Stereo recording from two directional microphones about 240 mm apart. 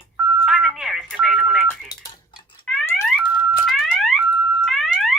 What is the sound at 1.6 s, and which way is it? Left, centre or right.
Telephone, centre.